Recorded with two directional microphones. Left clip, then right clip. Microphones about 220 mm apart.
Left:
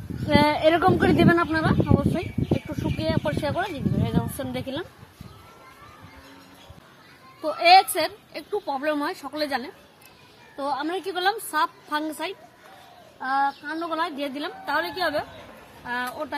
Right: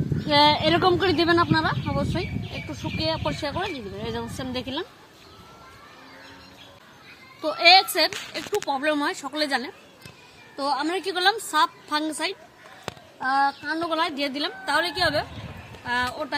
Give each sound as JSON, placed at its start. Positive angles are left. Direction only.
{"t": 0.3, "sound": "speech", "side_deg": 30}
{"t": 7.4, "sound": "a woman's voice", "side_deg": 0}